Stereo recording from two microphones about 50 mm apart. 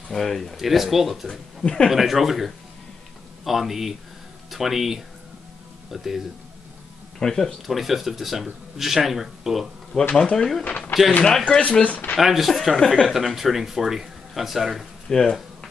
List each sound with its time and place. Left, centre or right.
0.1 s speech: centre
1.6 s speech: centre
1.9 s speech: centre
7.2 s speech: centre
7.6 s speech: centre
10.1 s speech: centre
11.8 s speech: left
12.2 s speech: centre
12.7 s speech: centre
13.1 s speech: centre
15.0 s speech: centre